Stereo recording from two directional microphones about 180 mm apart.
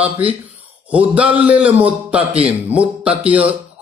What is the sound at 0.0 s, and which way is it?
A man's voice, 5° right (ahead or behind).